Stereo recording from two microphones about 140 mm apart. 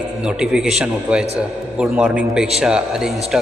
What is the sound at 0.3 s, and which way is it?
A man's voice, 5° right (ahead or behind).